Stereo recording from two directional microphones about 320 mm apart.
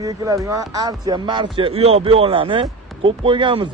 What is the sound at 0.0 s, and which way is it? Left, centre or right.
A man's voice, centre.